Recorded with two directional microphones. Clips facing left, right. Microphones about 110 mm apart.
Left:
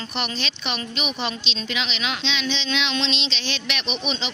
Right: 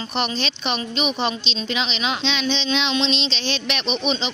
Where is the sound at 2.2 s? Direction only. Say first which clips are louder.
Right 4 dB; 40° right (ahead or behind).